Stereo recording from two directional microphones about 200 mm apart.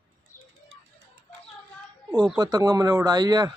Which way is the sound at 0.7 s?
75° right (ahead or behind).